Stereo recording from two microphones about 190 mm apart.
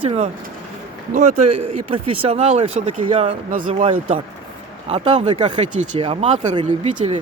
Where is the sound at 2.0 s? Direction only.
30° right (ahead or behind).